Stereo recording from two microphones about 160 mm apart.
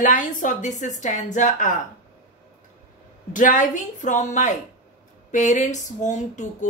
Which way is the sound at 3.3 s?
55° left (ahead or behind).